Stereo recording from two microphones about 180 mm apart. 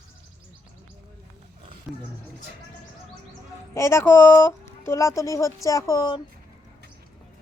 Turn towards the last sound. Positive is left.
turn(degrees=20)  # may be behind; listen again after turning